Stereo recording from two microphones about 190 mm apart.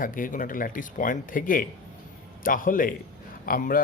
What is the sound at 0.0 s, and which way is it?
Speech, 45° left (ahead or behind).